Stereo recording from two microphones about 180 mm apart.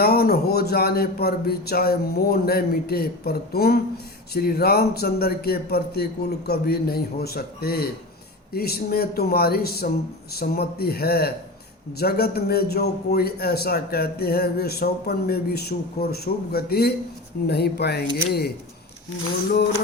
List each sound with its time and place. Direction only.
0.0 s speech: 60° left (ahead or behind)